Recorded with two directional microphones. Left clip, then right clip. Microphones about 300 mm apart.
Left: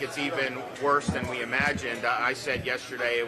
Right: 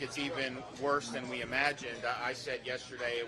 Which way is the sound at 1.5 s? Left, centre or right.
Right.